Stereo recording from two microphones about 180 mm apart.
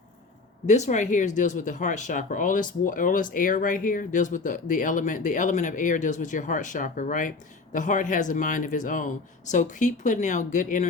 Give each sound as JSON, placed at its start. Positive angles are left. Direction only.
{"t": 0.7, "sound": "speech", "side_deg": 40}